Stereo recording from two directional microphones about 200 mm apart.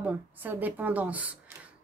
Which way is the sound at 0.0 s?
10° right (ahead or behind).